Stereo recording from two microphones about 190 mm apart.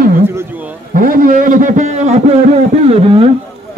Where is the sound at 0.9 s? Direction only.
45° right (ahead or behind); by 3.2 s 30° right (ahead or behind).